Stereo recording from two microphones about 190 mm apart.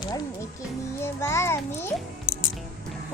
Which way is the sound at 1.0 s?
15° left (ahead or behind).